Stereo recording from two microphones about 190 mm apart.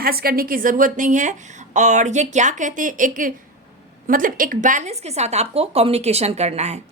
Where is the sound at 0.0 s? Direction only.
50° right (ahead or behind).